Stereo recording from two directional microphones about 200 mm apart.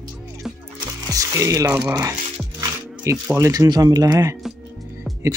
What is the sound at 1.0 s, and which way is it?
Speech, 15° right (ahead or behind).